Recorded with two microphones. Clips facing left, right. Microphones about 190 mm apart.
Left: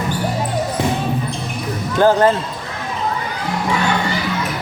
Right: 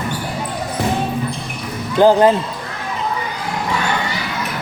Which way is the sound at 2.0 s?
15° right (ahead or behind).